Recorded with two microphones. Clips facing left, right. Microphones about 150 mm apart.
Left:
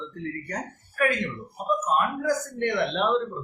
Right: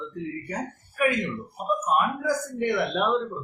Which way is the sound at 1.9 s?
10° right (ahead or behind).